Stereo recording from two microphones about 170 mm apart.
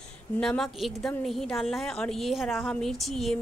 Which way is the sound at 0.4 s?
Centre (ahead or behind).